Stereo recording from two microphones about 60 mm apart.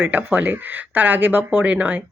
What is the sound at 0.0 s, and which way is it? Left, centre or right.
Speech, right.